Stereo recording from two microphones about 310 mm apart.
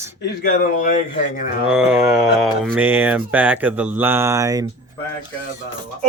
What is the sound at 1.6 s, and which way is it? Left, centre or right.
Speech, centre.